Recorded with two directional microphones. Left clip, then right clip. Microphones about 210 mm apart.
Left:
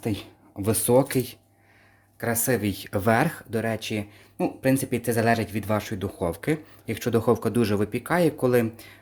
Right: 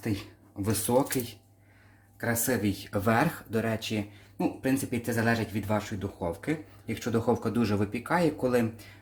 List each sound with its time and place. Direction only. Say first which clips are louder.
0.0 s speech: left 4 dB; 35° left (ahead or behind)
2.2 s speech: left 4 dB; 45° left (ahead or behind)